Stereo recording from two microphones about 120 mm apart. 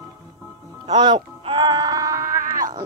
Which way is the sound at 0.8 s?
40° right (ahead or behind).